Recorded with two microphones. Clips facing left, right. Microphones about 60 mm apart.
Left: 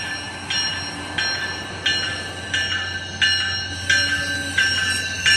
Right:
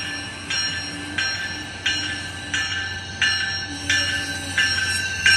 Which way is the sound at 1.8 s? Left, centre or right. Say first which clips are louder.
Left 2 dB; centre.